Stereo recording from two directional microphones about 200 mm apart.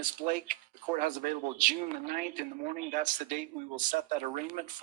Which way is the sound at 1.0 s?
40° right (ahead or behind).